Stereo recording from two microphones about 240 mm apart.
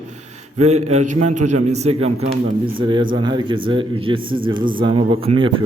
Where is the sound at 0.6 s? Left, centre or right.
Right.